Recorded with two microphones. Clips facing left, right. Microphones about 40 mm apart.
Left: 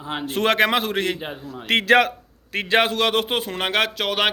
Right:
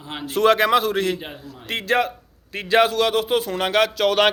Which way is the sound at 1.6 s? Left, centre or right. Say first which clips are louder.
Left 5 dB; left.